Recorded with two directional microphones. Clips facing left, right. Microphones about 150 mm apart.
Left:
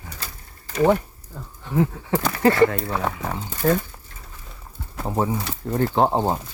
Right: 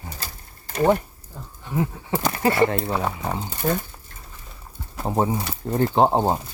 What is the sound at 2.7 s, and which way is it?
Pigeon, 25° right (ahead or behind).